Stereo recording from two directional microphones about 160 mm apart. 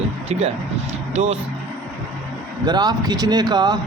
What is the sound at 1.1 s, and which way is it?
Speech, 45° right (ahead or behind).